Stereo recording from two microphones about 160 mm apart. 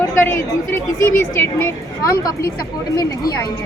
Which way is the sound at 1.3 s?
15° left (ahead or behind).